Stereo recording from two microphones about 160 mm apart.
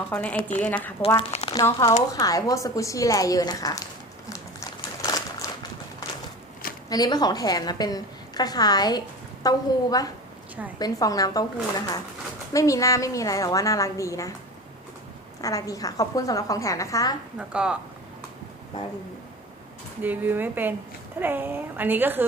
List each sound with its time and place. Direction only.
0.1 s a woman's voice: 10° left (ahead or behind)
1.0 s speech: 40° left (ahead or behind)
1.5 s a woman's voice: 25° left (ahead or behind)
4.8 s a sound: 25° left (ahead or behind)
6.9 s a woman's voice: 25° left (ahead or behind)
12.5 s a woman's voice: 20° left (ahead or behind)
15.4 s a woman's voice: 20° left (ahead or behind)
17.3 s a woman's voice: 5° right (ahead or behind)
20.0 s a woman's voice: 10° right (ahead or behind)